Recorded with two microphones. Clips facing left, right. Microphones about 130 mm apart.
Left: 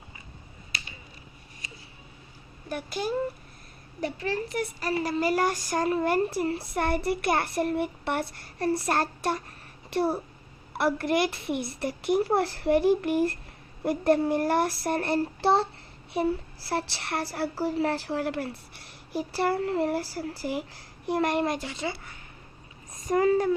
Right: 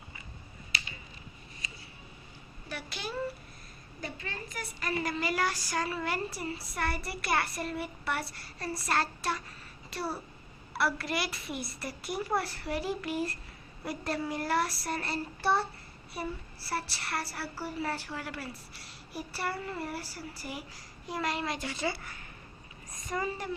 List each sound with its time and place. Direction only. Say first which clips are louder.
2.6 s a child's voice: left 9 dB; 45° left (ahead or behind)
4.0 s child singing: left 11 dB; 75° left (ahead or behind)
4.8 s a woman's voice: left 4 dB; 35° left (ahead or behind)
6.3 s speech: left 9 dB; 65° left (ahead or behind)
10.8 s a child's voice: left 7 dB; 50° left (ahead or behind)
11.4 s speech: left 8 dB; 65° left (ahead or behind)
16.1 s child singing: left 11 dB; 75° left (ahead or behind)
21.1 s speech: left 8 dB; 60° left (ahead or behind)
21.6 s speech: left 1 dB; 20° left (ahead or behind)
23.1 s speech: left 12 dB; 85° left